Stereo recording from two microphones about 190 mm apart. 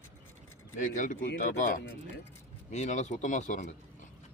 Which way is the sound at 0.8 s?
40° left (ahead or behind).